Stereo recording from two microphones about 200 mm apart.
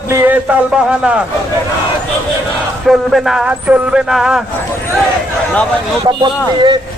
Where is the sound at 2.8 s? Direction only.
Centre (ahead or behind).